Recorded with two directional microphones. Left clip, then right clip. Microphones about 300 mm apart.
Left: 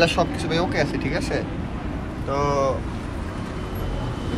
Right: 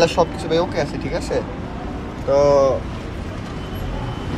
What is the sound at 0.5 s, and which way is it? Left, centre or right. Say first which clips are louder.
Speech: right 3 dB; centre.